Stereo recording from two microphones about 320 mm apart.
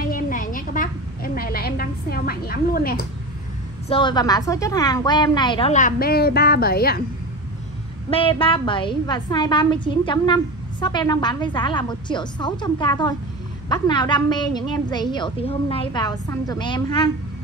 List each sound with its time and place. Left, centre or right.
0.0 s a sound: left
3.9 s a woman's voice: centre; by 7.0 s left
8.1 s a woman's voice: centre